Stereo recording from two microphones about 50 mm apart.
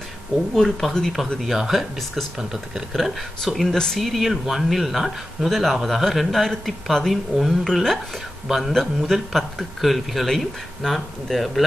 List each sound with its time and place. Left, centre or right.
0.6 s a man's voice: centre
6.0 s a man's voice: centre